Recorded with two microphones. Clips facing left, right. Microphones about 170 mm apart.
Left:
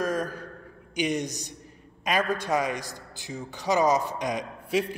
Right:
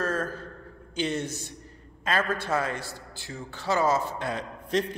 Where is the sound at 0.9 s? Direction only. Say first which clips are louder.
Left 2 dB; 15° left (ahead or behind).